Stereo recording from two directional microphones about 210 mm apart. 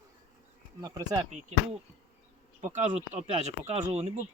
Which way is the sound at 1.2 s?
35° right (ahead or behind).